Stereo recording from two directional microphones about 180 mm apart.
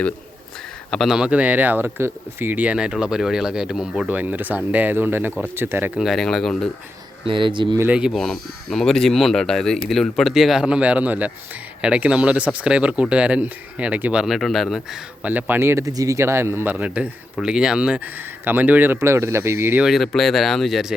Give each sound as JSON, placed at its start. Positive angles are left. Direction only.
{"t": 0.9, "sound": "speech", "side_deg": 0}
{"t": 6.1, "sound": "speech", "side_deg": 0}
{"t": 7.3, "sound": "speech", "side_deg": -25}
{"t": 7.8, "sound": "speech", "side_deg": -5}